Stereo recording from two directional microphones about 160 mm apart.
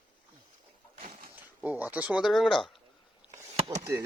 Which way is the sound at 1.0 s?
65° right (ahead or behind).